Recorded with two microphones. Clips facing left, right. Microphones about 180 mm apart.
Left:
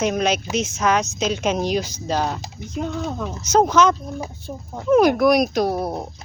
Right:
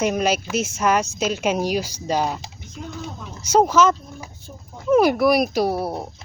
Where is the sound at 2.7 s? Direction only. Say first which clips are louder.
Left 8 dB; 80° left.